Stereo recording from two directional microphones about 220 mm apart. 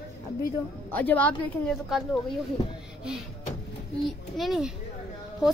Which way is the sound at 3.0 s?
5° right (ahead or behind).